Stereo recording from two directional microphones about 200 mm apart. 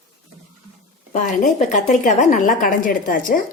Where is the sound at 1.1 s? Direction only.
35° left (ahead or behind).